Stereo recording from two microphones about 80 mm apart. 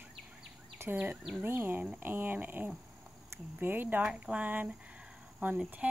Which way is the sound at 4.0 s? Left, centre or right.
Centre.